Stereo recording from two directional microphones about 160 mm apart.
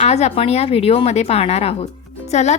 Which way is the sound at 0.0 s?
40° left (ahead or behind).